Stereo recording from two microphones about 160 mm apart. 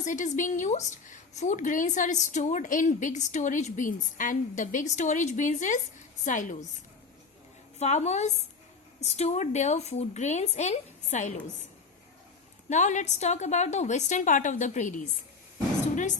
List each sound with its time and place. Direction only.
0.0 s a woman's voice: 50° left (ahead or behind)
7.8 s a woman's voice: 45° left (ahead or behind)
12.6 s a woman's voice: 50° left (ahead or behind)